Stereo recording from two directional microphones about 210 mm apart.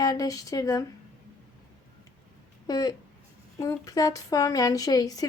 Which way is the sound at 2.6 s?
20° left (ahead or behind).